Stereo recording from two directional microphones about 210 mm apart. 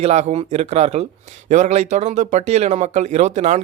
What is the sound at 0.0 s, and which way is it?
Speech, 30° right (ahead or behind).